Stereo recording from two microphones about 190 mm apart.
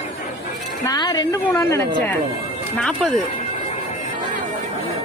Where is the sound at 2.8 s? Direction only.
Centre (ahead or behind).